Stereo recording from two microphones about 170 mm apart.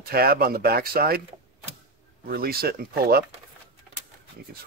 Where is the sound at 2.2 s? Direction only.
60° right (ahead or behind).